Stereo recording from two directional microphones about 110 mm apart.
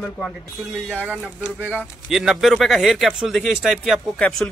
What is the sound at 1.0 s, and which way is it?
Speech, 15° right (ahead or behind).